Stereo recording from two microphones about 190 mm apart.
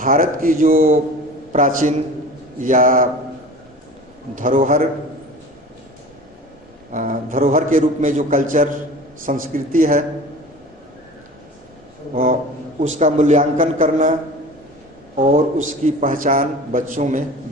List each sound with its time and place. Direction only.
0.0 s a man's voice: 45° right (ahead or behind)
4.4 s a man's voice: 45° right (ahead or behind)
6.9 s a man's voice: 45° right (ahead or behind)
12.1 s a man's voice: 45° right (ahead or behind)
15.2 s a man's voice: 40° right (ahead or behind)